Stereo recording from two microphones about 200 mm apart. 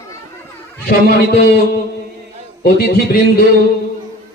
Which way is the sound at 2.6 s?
50° left (ahead or behind).